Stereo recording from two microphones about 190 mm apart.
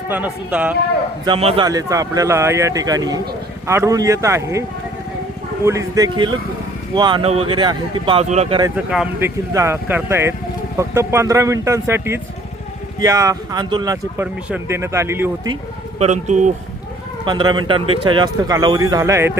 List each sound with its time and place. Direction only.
0.1 s speech: 10° right (ahead or behind)
1.2 s speech: 30° right (ahead or behind)
1.6 s speech: 20° right (ahead or behind)
5.6 s speech: 15° right (ahead or behind); by 8.6 s 30° right (ahead or behind)
8.6 s speech: 5° right (ahead or behind)
16.0 s speech: 40° right (ahead or behind)
17.2 s speech: 25° right (ahead or behind)